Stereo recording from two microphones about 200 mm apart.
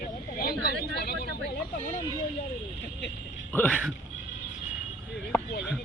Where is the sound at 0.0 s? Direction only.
45° left (ahead or behind).